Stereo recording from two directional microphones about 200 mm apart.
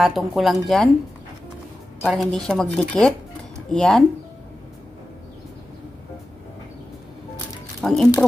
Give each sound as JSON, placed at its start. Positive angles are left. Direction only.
{"t": 0.0, "sound": "a woman's voice", "side_deg": 0}
{"t": 2.0, "sound": "a woman's voice", "side_deg": 0}
{"t": 7.8, "sound": "speech", "side_deg": 0}